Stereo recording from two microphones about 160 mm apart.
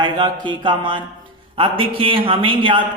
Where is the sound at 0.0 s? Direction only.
30° right (ahead or behind).